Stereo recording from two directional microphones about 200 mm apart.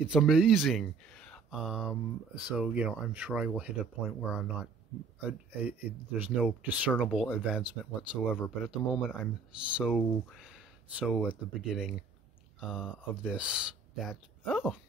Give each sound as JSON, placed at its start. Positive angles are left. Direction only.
{"t": 0.0, "sound": "speech", "side_deg": -5}